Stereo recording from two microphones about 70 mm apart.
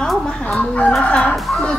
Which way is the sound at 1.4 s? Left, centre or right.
Centre.